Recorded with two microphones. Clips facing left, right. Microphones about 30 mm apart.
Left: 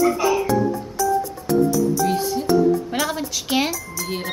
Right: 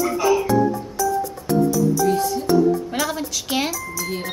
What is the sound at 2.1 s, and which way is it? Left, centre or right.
Music, centre.